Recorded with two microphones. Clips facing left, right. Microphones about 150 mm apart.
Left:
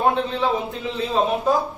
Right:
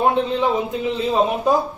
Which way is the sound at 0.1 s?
15° right (ahead or behind).